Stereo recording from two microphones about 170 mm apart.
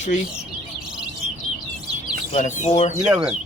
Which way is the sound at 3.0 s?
5° right (ahead or behind).